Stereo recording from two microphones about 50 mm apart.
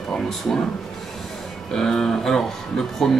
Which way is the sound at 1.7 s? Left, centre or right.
Centre.